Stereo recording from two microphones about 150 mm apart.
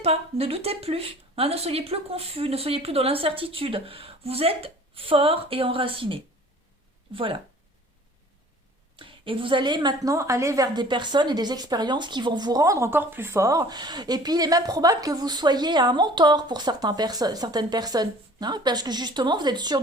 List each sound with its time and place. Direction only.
0.0 s speech: 40° right (ahead or behind)
9.0 s a woman's voice: 35° right (ahead or behind)